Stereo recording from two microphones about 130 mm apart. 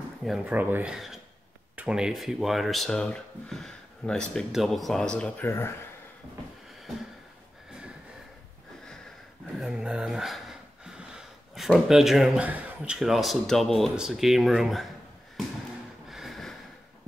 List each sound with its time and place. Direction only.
0.2 s speech: centre (ahead or behind)
0.5 s speech: 15° right (ahead or behind)
0.9 s speech: centre (ahead or behind)
5.4 s speech: 20° left (ahead or behind)
9.6 s speech: 5° right (ahead or behind)
16.1 s snort: centre (ahead or behind)